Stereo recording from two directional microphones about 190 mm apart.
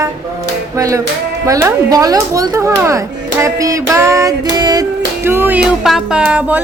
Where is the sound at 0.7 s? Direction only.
15° right (ahead or behind).